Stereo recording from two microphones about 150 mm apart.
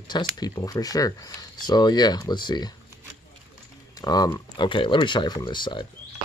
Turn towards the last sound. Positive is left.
turn(degrees=30)  # may be behind; listen again after turning